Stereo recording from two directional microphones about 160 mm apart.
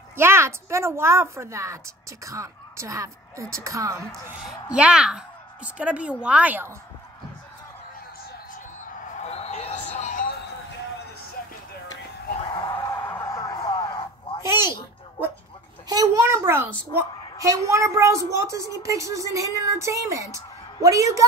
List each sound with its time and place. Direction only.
0.1 s a woman's voice: 15° right (ahead or behind)
4.1 s a woman's voice: centre (ahead or behind)
9.1 s a sound: 45° left (ahead or behind); by 10.5 s 60° left (ahead or behind)
12.5 s music: 20° left (ahead or behind)
14.7 s a sound: 10° right (ahead or behind)
15.9 s a child's voice: 20° right (ahead or behind)